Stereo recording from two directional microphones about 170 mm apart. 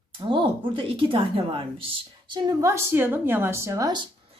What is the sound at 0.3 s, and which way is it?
Speech, 30° right (ahead or behind).